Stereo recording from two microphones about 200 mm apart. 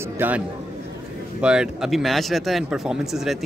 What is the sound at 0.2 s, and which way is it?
Speech, 10° right (ahead or behind).